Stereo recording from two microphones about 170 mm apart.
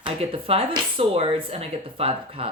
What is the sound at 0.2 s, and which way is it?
A woman's voice, 35° right (ahead or behind).